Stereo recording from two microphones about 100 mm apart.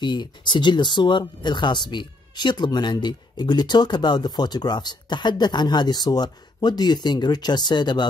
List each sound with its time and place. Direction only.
0.0 s speech: 45° left (ahead or behind)